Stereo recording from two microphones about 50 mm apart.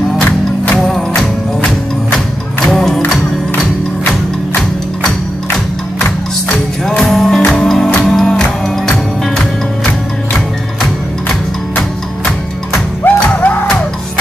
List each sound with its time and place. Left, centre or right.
0.7 s music: centre
7.0 s music: centre
13.0 s music: left